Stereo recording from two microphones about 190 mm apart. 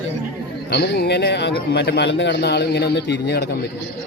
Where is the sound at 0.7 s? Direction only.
60° left (ahead or behind).